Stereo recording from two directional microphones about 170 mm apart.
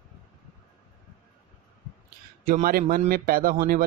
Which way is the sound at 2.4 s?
55° right (ahead or behind).